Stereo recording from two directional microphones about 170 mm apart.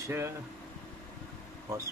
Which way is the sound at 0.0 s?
15° right (ahead or behind).